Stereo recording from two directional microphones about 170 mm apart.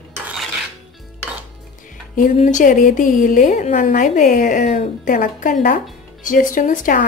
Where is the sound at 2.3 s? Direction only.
45° left (ahead or behind).